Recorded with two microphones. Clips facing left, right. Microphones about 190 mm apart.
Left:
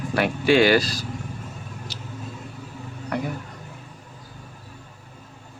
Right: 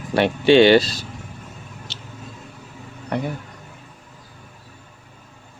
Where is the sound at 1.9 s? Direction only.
25° right (ahead or behind).